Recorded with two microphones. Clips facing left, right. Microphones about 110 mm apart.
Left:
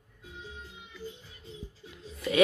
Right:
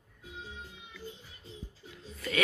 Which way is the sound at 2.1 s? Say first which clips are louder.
Left 6 dB; 15° left (ahead or behind).